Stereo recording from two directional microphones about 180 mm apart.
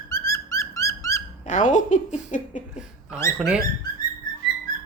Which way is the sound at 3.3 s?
5° right (ahead or behind).